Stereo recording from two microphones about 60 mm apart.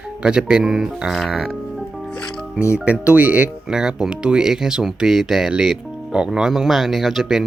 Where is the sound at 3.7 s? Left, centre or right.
Centre.